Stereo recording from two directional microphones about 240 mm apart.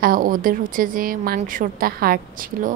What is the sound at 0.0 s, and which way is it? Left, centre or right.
A woman's voice, right.